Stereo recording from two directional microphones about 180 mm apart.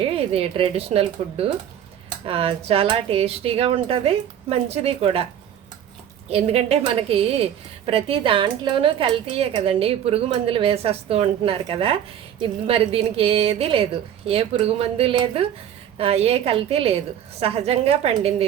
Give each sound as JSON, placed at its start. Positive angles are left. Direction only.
{"t": 0.0, "sound": "a woman's voice", "side_deg": -35}
{"t": 6.2, "sound": "a woman's voice", "side_deg": -35}